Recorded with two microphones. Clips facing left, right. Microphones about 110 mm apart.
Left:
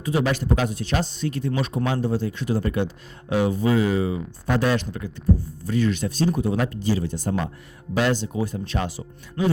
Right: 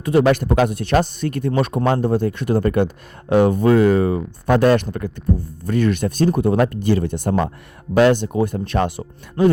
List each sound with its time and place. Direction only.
0.0 s speech: 55° right (ahead or behind)